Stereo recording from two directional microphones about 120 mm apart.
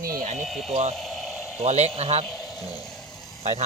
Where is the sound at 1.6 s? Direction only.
65° right (ahead or behind).